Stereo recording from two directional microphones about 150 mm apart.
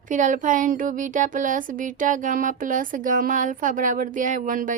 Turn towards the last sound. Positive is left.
turn(degrees=-65)  # may be behind; listen again after turning